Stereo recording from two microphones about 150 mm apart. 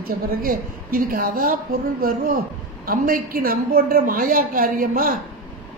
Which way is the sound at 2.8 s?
70° right (ahead or behind).